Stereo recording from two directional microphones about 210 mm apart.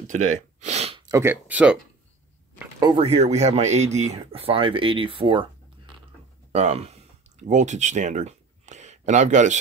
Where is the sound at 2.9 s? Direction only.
30° right (ahead or behind).